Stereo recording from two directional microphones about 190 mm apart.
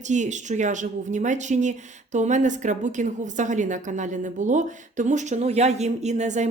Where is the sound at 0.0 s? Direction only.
40° right (ahead or behind).